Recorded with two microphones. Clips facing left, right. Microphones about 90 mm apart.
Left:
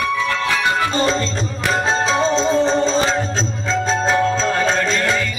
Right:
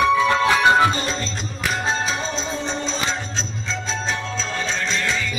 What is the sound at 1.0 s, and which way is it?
Music, 40° left (ahead or behind).